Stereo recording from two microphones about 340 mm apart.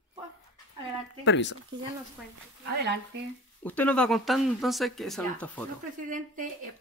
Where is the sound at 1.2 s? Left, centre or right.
Left.